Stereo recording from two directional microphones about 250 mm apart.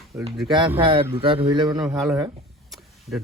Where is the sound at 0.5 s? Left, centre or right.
Centre.